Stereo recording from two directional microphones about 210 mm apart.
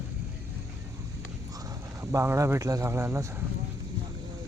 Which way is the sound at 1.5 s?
15° right (ahead or behind).